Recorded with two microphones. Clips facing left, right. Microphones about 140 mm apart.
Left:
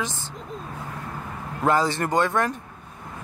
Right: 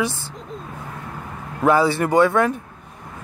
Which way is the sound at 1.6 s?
10° right (ahead or behind).